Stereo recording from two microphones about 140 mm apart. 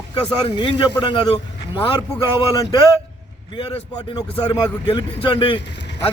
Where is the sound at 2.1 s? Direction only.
25° left (ahead or behind).